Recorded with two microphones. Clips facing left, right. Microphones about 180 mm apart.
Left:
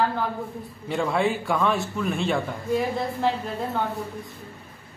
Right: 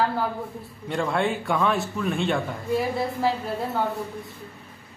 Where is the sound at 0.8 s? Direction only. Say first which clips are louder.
Left 1 dB; centre (ahead or behind).